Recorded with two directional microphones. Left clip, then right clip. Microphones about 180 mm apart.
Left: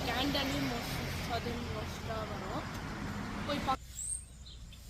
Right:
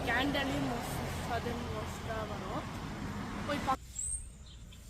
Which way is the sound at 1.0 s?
30° right (ahead or behind).